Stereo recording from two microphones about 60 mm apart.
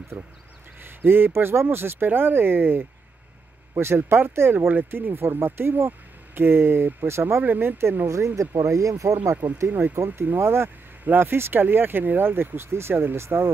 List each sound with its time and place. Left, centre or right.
0.1 s speech: right
7.4 s speech: right
8.4 s speech: right
9.7 s speech: right